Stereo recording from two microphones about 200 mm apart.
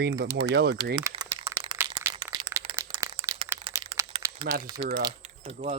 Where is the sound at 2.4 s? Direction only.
15° right (ahead or behind).